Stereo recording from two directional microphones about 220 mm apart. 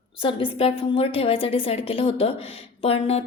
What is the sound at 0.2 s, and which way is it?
A woman's voice, 25° left (ahead or behind).